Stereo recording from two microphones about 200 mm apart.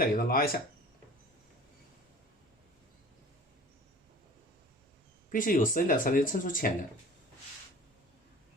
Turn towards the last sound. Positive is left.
turn(degrees=40)  # may be behind; listen again after turning